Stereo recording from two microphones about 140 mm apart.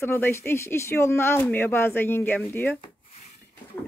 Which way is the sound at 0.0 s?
15° left (ahead or behind).